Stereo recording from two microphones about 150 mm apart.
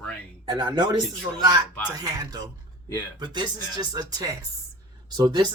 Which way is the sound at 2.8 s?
15° left (ahead or behind).